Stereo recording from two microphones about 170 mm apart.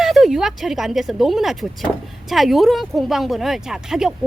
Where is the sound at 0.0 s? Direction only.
Centre (ahead or behind).